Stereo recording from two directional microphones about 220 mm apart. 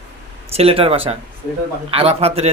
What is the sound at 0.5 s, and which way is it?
Speech, 25° right (ahead or behind).